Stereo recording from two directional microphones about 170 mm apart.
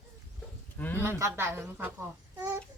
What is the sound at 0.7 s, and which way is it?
Bird, 10° left (ahead or behind).